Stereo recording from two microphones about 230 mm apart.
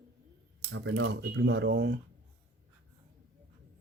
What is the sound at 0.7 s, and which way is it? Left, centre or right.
Speech, right.